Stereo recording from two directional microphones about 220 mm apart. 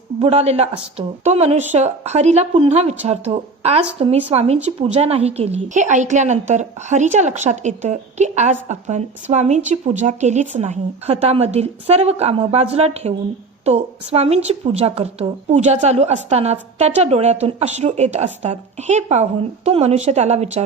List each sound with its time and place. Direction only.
0.2 s a woman's voice: 30° right (ahead or behind)